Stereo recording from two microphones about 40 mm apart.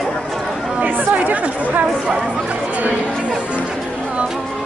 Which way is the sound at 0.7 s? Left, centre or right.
Right.